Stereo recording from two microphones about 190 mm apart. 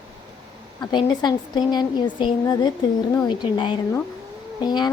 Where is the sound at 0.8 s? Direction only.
25° left (ahead or behind).